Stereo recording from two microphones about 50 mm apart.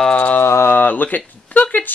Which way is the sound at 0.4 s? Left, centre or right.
Left.